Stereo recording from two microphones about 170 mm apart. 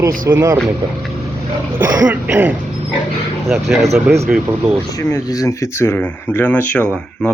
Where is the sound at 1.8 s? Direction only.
15° right (ahead or behind).